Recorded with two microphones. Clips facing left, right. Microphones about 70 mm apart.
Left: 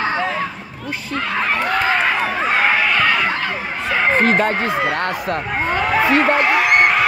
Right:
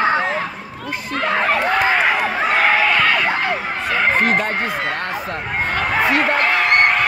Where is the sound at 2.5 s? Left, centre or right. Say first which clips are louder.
Right 1 dB; centre.